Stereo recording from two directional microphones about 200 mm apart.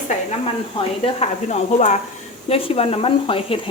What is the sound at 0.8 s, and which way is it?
Speech, 30° left (ahead or behind).